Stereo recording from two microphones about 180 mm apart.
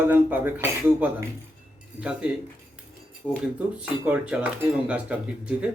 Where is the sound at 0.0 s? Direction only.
10° right (ahead or behind).